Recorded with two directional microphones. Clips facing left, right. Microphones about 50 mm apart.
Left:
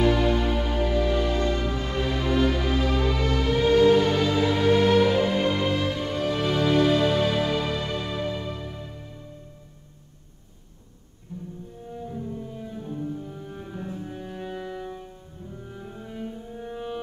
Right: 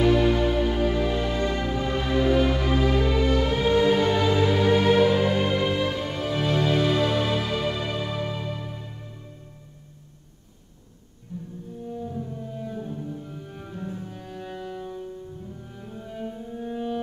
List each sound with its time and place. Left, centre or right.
0.2 s music: centre
13.3 s music: centre